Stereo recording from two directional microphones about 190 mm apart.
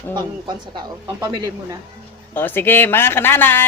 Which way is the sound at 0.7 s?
20° right (ahead or behind).